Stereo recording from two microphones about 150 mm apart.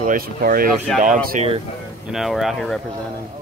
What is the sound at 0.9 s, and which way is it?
Speech, 60° right (ahead or behind).